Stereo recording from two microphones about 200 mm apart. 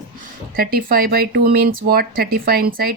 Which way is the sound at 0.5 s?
45° right (ahead or behind).